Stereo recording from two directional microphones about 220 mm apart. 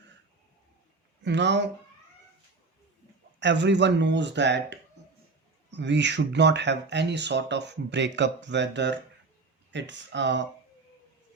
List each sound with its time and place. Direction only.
1.2 s speech: 55° right (ahead or behind)
3.4 s speech: 55° right (ahead or behind)